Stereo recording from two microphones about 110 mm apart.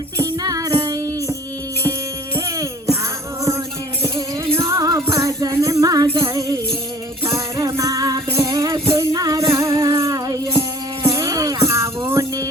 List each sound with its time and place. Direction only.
0.2 s music: 35° right (ahead or behind)
4.6 s music: 35° right (ahead or behind)
7.3 s music: 30° right (ahead or behind)